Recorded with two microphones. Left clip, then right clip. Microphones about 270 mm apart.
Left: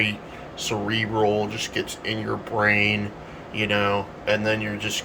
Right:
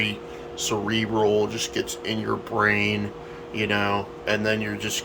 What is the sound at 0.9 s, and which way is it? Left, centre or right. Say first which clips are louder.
Speech: even; centre.